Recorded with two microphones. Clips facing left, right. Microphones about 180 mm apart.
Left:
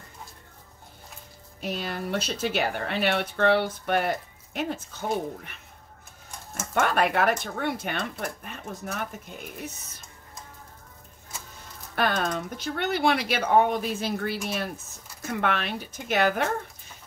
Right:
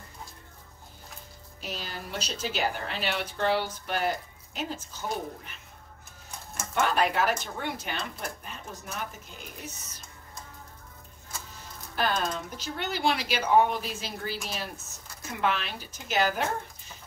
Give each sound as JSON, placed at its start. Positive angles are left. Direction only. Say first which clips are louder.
{"t": 1.6, "sound": "speech", "louder": "left 7 dB", "side_deg": 60}
{"t": 6.7, "sound": "speech", "louder": "left 2 dB", "side_deg": 60}
{"t": 11.9, "sound": "speech", "louder": "left 3 dB", "side_deg": 60}